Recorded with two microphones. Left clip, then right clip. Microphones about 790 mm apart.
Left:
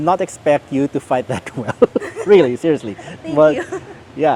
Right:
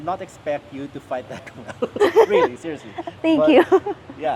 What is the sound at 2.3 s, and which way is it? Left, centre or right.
Speech, left.